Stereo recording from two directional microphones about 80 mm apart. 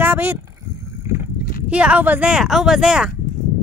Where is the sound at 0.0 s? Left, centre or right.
Right.